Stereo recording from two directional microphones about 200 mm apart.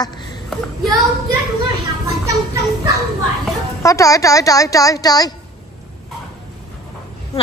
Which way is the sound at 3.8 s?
15° left (ahead or behind).